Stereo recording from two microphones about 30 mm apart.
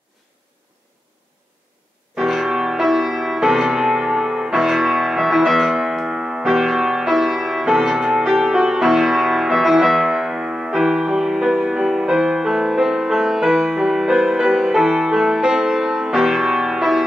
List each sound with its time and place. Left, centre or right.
2.1 s music: centre